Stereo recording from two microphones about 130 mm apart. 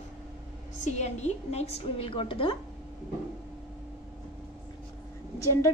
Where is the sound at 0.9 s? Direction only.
60° left (ahead or behind); by 2.6 s 40° left (ahead or behind).